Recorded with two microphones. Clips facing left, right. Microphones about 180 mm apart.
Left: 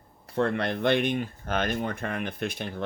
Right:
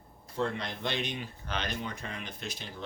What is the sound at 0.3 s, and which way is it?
Speech, 60° left (ahead or behind).